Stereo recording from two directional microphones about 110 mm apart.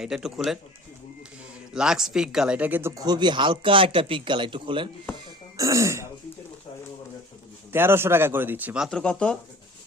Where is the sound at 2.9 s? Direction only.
35° right (ahead or behind).